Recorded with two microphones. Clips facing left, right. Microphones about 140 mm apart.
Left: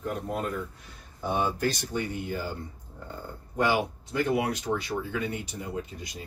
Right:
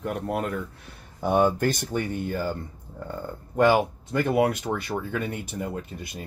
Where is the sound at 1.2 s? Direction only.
55° right (ahead or behind).